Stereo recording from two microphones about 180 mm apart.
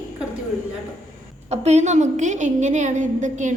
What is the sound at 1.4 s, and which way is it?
A woman's voice, 35° right (ahead or behind).